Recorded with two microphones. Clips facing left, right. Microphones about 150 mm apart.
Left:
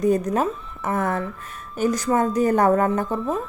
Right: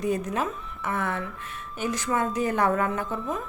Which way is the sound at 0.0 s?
40° left (ahead or behind).